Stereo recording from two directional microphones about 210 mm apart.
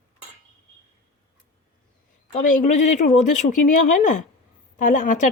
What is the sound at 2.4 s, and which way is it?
Speech, 35° left (ahead or behind).